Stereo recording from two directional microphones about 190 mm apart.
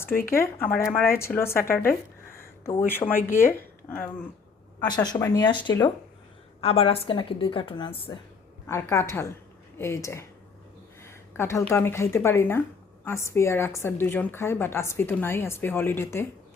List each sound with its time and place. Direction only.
0.3 s a woman's voice: 15° left (ahead or behind)
2.3 s a sound: 15° left (ahead or behind)
3.4 s a woman's voice: 10° left (ahead or behind)
4.8 s a woman's voice: 20° left (ahead or behind)
8.6 s a woman's voice: 15° left (ahead or behind)
11.0 s a sound: 15° left (ahead or behind)
11.6 s a woman's voice: 10° left (ahead or behind)